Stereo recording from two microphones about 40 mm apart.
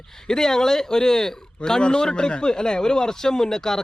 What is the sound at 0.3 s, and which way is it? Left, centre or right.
Speech, centre.